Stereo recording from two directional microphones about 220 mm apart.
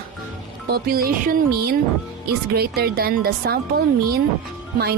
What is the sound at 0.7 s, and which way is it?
Speech, 45° right (ahead or behind).